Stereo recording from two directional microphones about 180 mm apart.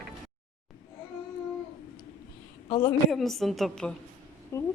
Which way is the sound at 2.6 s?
30° left (ahead or behind).